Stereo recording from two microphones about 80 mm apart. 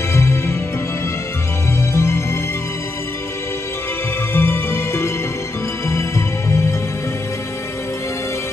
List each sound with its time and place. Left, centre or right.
0.1 s music: left
2.0 s music: left
4.3 s music: left